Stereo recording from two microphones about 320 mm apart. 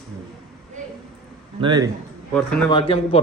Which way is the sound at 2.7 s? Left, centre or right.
Centre.